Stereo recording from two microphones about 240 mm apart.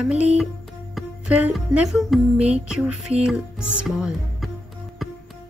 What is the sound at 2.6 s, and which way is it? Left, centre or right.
Music, centre.